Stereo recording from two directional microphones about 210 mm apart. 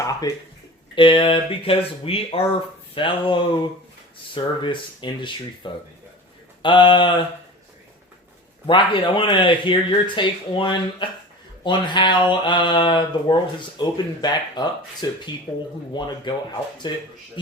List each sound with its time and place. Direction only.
0.0 s a sound: 15° left (ahead or behind)
0.9 s speech: 25° left (ahead or behind)
8.6 s speech: 25° left (ahead or behind)